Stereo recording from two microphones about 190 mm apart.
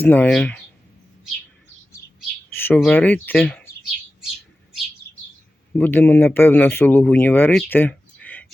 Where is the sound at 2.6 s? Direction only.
10° left (ahead or behind).